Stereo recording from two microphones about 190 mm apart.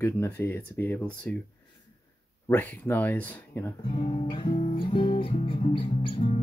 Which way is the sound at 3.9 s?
25° left (ahead or behind).